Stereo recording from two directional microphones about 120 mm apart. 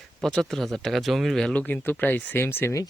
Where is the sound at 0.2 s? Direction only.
Centre (ahead or behind).